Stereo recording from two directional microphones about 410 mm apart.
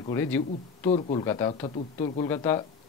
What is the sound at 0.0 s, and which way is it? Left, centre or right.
A man's voice, centre.